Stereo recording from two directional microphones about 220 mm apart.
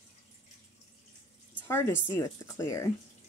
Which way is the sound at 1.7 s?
10° left (ahead or behind).